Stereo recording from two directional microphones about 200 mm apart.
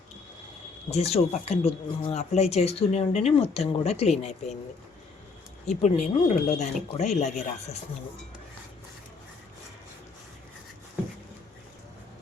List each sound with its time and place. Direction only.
0.9 s speech: 30° left (ahead or behind)
5.6 s speech: 35° left (ahead or behind)